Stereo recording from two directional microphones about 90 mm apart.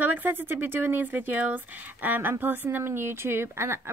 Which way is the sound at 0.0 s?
20° right (ahead or behind).